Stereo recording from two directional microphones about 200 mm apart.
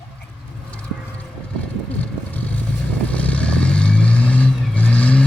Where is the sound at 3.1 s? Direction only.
5° left (ahead or behind).